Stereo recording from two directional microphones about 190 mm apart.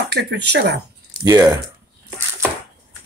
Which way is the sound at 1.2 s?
20° right (ahead or behind).